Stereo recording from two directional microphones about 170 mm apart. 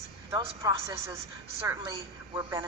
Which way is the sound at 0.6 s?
20° right (ahead or behind).